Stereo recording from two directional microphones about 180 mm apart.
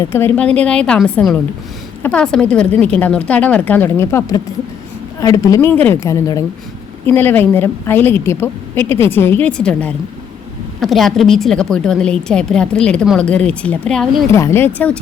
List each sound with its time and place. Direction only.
0.0 s a woman's voice: 15° left (ahead or behind)
14.3 s a woman's voice: 15° left (ahead or behind)